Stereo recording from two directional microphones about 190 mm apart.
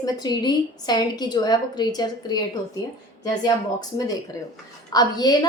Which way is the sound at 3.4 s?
20° left (ahead or behind).